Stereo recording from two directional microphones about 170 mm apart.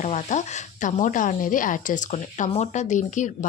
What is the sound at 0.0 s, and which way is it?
Speech, 45° left (ahead or behind).